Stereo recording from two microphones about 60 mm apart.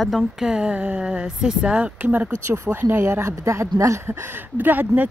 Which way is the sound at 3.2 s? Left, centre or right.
Right.